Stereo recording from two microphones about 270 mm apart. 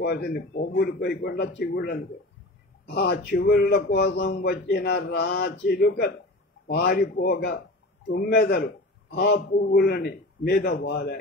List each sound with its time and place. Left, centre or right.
0.0 s a man's voice: left